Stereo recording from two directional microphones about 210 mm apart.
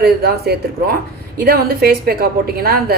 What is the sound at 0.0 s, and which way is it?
Speech, 45° right (ahead or behind).